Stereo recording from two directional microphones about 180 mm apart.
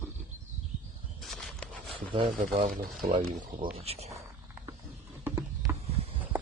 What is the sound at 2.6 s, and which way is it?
Speech, 45° right (ahead or behind).